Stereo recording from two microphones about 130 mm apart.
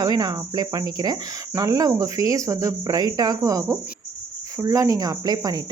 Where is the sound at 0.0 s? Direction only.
30° right (ahead or behind).